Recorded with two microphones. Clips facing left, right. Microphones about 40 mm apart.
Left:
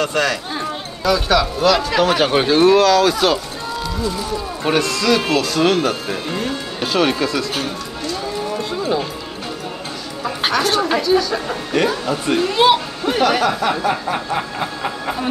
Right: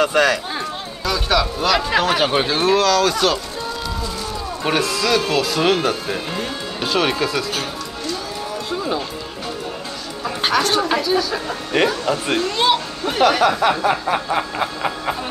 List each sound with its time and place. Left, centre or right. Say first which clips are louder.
0.0 s speech: right 3 dB; centre
1.8 s speech: left 1 dB; centre
2.0 s speech: left 2 dB; centre
4.6 s speech: left 2 dB; centre
10.2 s speech: even; centre